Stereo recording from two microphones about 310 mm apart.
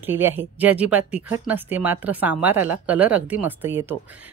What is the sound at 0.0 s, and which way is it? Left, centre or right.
A woman's voice, centre.